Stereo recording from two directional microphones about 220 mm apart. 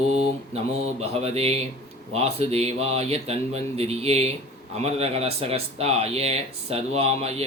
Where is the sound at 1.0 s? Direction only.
30° right (ahead or behind).